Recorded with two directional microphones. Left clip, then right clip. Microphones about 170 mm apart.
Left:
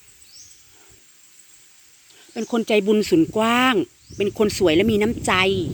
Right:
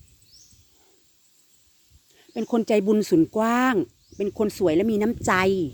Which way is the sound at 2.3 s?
35° right (ahead or behind).